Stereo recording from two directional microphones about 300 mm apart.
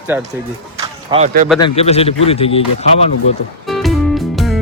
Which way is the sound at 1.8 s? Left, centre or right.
Centre.